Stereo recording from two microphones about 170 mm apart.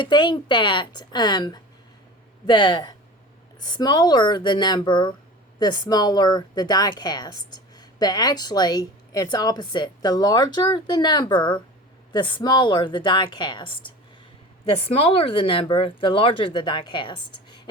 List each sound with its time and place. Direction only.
0.0 s a woman's voice: 25° left (ahead or behind)